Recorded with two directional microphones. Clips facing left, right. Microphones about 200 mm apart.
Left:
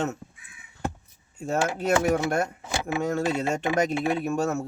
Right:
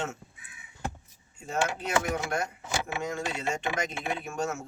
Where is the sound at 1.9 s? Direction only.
45° left (ahead or behind).